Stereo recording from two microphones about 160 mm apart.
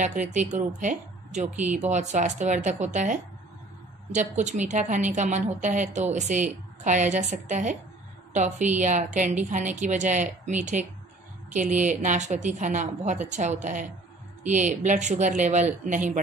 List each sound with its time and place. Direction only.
0.3 s a woman's voice: 45° right (ahead or behind)
11.8 s a woman's voice: 50° right (ahead or behind)